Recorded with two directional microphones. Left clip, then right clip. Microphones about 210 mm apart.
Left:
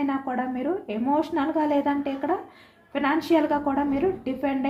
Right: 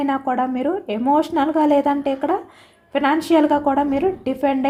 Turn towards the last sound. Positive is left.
turn(degrees=-45)  # may be behind; listen again after turning